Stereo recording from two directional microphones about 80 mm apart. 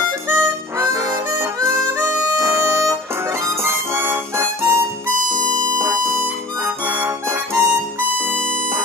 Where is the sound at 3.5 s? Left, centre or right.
Right.